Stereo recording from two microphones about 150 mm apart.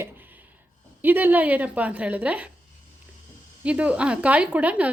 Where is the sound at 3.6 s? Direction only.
10° right (ahead or behind).